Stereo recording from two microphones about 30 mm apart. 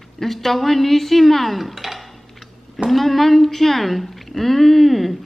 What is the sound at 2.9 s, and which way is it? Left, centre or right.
Speech, centre.